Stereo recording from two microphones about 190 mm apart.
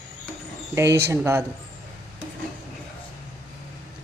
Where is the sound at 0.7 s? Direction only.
15° right (ahead or behind).